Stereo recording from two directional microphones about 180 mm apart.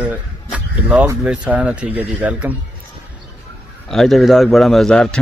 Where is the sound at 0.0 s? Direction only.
5° right (ahead or behind).